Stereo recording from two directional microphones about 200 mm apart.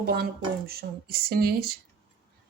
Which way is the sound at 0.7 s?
50° right (ahead or behind).